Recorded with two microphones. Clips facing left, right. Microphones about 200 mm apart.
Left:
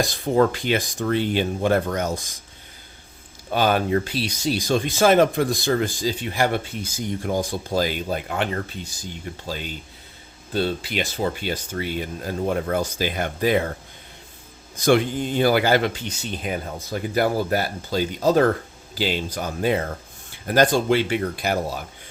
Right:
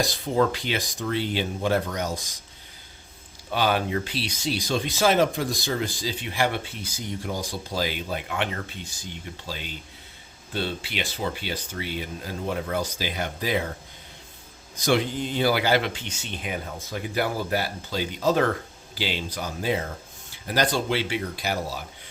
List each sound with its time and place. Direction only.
0.0 s speech: 50° left (ahead or behind)
3.5 s speech: 45° left (ahead or behind)
14.8 s speech: 50° left (ahead or behind)